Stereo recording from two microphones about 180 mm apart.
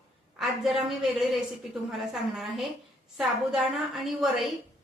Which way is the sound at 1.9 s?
Centre (ahead or behind).